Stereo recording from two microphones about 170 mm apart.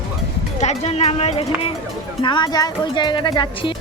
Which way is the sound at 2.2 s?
25° left (ahead or behind).